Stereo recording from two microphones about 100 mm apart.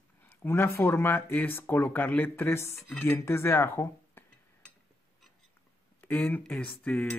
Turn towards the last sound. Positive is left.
turn(degrees=15)  # may be behind; listen again after turning